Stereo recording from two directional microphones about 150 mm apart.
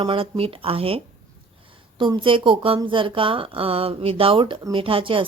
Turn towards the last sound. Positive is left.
turn(degrees=-35)  # may be behind; listen again after turning